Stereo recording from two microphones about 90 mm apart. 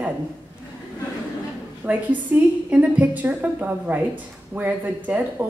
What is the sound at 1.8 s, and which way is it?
A woman's voice, 20° right (ahead or behind).